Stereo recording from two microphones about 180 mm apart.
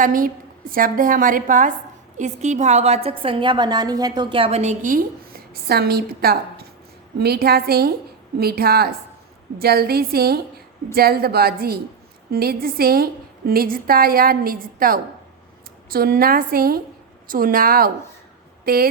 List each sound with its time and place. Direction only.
0.0 s a woman's voice: 50° right (ahead or behind)